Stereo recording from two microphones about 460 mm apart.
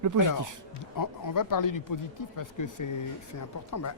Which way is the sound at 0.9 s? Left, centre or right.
Left.